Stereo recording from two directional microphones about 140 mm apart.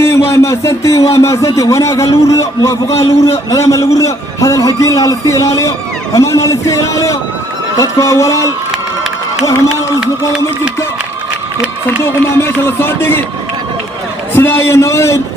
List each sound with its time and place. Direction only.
0.0 s a sound: 20° left (ahead or behind)
1.1 s a man's voice: 20° left (ahead or behind)
11.9 s speech: 15° left (ahead or behind)
14.3 s a man's voice: 15° left (ahead or behind)